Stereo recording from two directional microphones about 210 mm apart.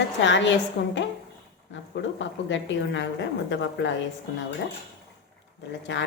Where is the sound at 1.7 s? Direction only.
60° left (ahead or behind).